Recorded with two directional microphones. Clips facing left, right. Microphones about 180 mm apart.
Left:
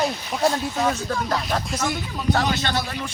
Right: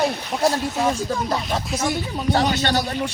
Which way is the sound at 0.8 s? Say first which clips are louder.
Right 2 dB; 15° right (ahead or behind).